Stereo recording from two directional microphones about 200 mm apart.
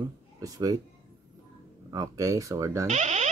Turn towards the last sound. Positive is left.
turn(degrees=-35)  # may be behind; listen again after turning